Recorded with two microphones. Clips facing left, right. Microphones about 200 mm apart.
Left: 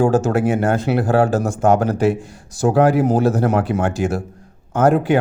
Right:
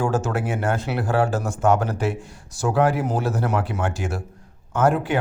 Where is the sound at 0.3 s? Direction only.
40° left (ahead or behind).